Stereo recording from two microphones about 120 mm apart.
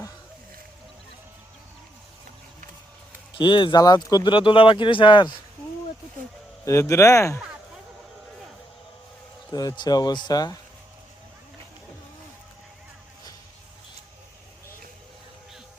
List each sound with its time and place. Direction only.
3.3 s speech: 45° left (ahead or behind)
6.7 s speech: 25° left (ahead or behind)
9.5 s speech: 35° left (ahead or behind)